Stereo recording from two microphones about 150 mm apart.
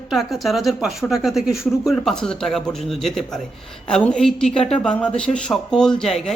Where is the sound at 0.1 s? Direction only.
Centre (ahead or behind).